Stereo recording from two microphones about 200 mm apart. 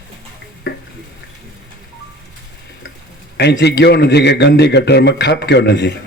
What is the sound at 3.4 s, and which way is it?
A man's voice, 55° left (ahead or behind).